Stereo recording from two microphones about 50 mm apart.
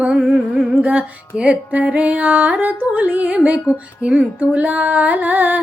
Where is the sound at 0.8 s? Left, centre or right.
Right.